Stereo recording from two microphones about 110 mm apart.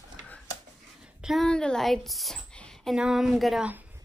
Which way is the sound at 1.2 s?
Centre (ahead or behind).